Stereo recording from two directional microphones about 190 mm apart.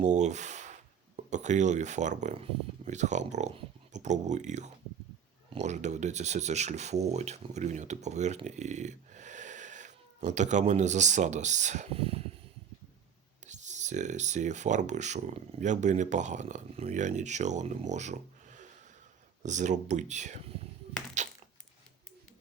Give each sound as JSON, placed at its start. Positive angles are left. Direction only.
{"t": 0.0, "sound": "speech", "side_deg": -40}
{"t": 13.4, "sound": "speech", "side_deg": -40}